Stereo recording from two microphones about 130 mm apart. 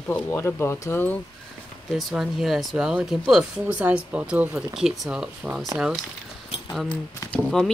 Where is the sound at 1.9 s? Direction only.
Centre (ahead or behind).